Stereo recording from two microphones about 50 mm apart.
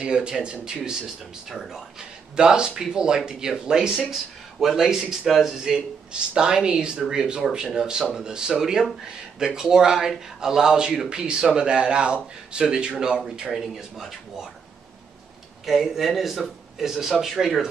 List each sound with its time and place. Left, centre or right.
0.0 s speech: centre
15.6 s a man's voice: centre